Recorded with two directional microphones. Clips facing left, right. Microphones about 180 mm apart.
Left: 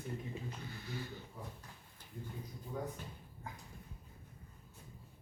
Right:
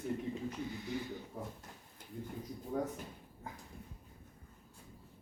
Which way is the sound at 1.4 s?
50° right (ahead or behind).